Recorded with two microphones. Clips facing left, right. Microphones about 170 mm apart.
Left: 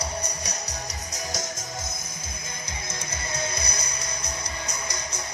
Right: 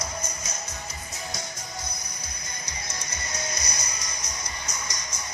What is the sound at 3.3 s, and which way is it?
Music, 55° left (ahead or behind).